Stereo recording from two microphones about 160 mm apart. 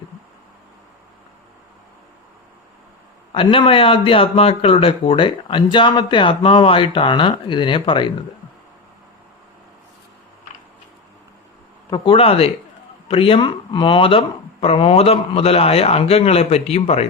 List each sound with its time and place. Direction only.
3.3 s speech: 30° left (ahead or behind)
11.9 s speech: 35° left (ahead or behind)